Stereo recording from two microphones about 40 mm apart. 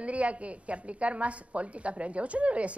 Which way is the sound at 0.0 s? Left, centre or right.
Right.